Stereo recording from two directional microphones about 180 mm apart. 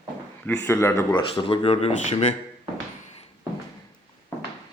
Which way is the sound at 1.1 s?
30° left (ahead or behind).